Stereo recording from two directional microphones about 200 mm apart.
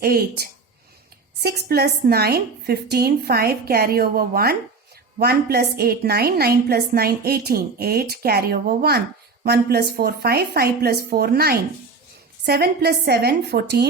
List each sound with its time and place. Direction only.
0.0 s a woman's voice: 50° right (ahead or behind)